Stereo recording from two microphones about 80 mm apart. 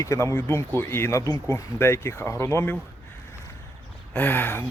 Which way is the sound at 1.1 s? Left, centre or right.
Left.